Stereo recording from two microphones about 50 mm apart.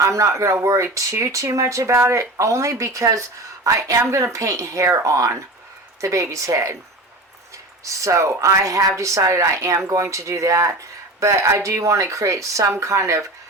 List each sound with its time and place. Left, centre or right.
0.0 s speech: right
7.9 s speech: right